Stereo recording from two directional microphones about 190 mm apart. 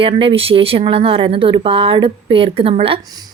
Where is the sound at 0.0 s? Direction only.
30° right (ahead or behind).